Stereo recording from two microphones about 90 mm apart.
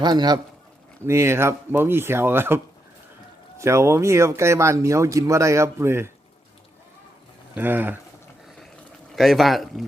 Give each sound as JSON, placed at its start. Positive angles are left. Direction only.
{"t": 0.0, "sound": "a man's voice", "side_deg": -50}
{"t": 1.0, "sound": "speech", "side_deg": -30}
{"t": 3.6, "sound": "speech", "side_deg": -30}
{"t": 7.5, "sound": "speech", "side_deg": -20}
{"t": 9.1, "sound": "a man's voice", "side_deg": 0}